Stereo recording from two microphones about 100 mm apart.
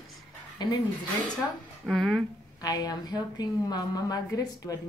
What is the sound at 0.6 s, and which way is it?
Speech, 45° left (ahead or behind).